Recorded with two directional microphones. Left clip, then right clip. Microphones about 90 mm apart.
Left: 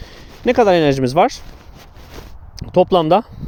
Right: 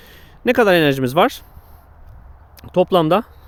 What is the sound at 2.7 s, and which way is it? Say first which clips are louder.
Speech: left 2 dB; 20° left (ahead or behind).